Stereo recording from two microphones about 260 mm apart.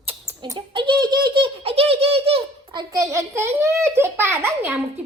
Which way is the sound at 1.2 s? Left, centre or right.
Centre.